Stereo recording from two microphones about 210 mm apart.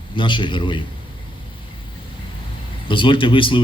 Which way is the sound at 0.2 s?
25° left (ahead or behind).